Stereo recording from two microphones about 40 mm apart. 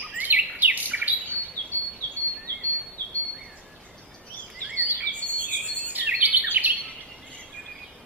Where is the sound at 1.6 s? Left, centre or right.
Left.